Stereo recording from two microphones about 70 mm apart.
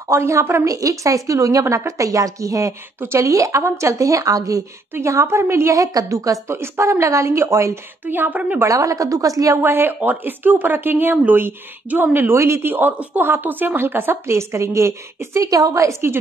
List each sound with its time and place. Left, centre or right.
0.1 s a woman's voice: right
0.7 s a woman's voice: right
3.0 s a woman's voice: right
3.3 s a woman's voice: right
5.0 s a woman's voice: right
6.5 s a woman's voice: right
8.1 s a woman's voice: right
8.6 s a woman's voice: right
9.6 s a woman's voice: right